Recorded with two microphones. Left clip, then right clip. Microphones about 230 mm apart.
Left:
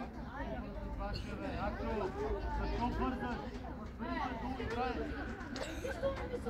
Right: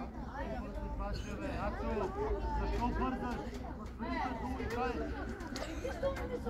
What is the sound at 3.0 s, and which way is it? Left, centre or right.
Chatter, centre.